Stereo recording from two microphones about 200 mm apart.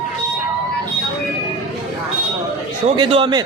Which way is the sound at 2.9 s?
25° right (ahead or behind).